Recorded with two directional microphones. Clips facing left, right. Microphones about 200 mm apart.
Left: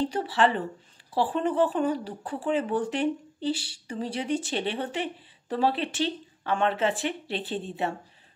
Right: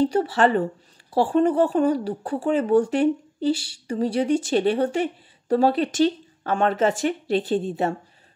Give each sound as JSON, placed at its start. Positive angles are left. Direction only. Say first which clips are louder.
{"t": 0.0, "sound": "speech", "louder": "right 5 dB", "side_deg": -45}